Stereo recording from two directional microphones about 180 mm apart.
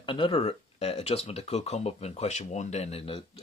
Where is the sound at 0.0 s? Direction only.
30° left (ahead or behind).